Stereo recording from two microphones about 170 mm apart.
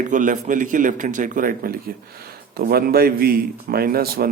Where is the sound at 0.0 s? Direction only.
50° right (ahead or behind).